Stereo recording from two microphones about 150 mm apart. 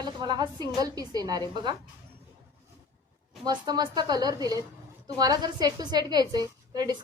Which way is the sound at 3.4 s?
25° right (ahead or behind).